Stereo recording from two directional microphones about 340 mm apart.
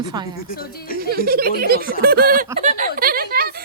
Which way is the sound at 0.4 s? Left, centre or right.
Left.